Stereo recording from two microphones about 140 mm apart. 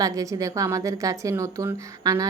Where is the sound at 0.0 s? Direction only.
25° right (ahead or behind).